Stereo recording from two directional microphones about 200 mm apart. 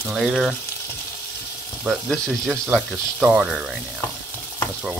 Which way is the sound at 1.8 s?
Centre (ahead or behind).